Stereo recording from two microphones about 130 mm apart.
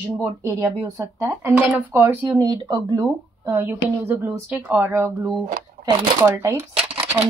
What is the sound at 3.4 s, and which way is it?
Speech, 15° right (ahead or behind).